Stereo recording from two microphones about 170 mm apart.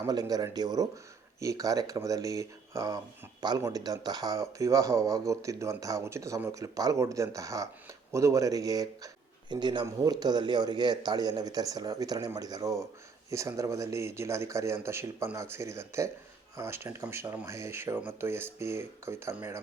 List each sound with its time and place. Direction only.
0.0 s speech: 20° right (ahead or behind)